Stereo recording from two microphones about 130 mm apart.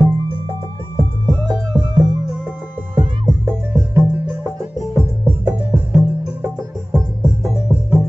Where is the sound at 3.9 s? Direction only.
20° right (ahead or behind).